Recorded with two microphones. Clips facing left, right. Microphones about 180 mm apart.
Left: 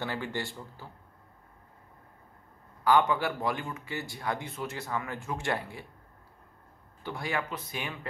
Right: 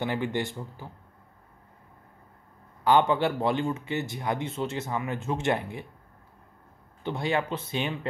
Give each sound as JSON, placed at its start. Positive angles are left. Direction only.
{"t": 0.0, "sound": "speech", "side_deg": -20}
{"t": 2.8, "sound": "speech", "side_deg": -25}
{"t": 7.0, "sound": "speech", "side_deg": -25}